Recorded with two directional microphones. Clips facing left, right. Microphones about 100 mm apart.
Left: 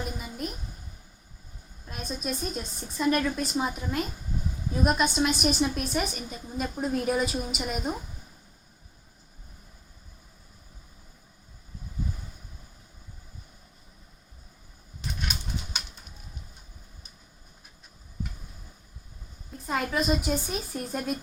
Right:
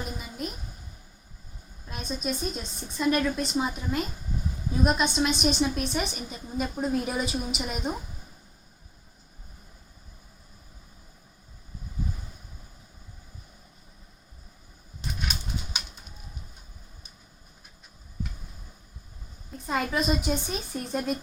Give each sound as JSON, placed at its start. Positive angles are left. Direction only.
{"t": 0.2, "sound": "a sound", "side_deg": 0}
{"t": 1.9, "sound": "a woman's voice", "side_deg": 5}
{"t": 19.6, "sound": "a woman's voice", "side_deg": 0}